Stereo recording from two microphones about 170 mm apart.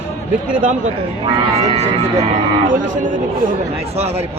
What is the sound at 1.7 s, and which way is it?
Speech, 40° right (ahead or behind).